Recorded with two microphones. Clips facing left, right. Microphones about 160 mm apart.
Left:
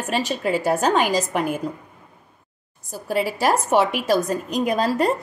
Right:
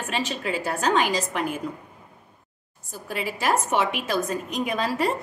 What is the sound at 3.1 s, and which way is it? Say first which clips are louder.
A woman's voice: left 5 dB; 40° left (ahead or behind).